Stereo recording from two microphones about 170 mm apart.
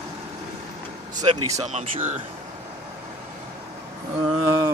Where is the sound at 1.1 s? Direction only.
20° right (ahead or behind).